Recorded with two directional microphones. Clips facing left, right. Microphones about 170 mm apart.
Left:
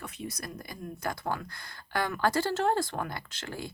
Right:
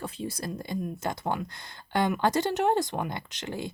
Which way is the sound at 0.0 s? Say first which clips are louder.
Right 5 dB; 30° right (ahead or behind).